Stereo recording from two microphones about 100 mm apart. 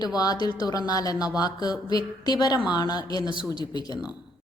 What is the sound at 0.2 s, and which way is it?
A woman's voice, 40° left (ahead or behind).